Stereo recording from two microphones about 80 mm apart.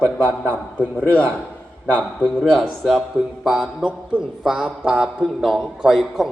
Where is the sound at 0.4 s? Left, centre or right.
Left.